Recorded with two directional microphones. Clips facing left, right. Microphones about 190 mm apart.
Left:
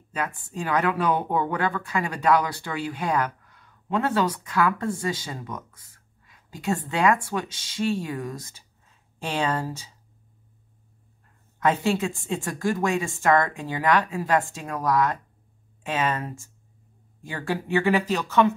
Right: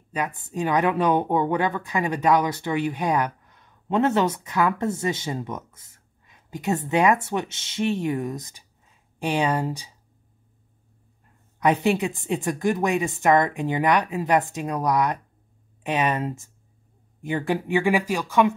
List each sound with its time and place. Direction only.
0.1 s speech: 20° right (ahead or behind)
11.6 s speech: 15° right (ahead or behind)